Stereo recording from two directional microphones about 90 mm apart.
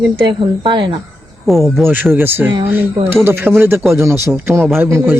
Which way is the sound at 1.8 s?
25° right (ahead or behind).